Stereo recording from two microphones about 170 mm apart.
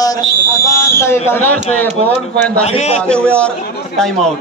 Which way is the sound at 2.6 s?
40° left (ahead or behind).